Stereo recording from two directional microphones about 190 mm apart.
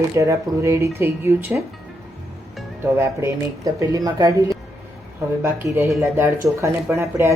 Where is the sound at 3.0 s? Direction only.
15° right (ahead or behind).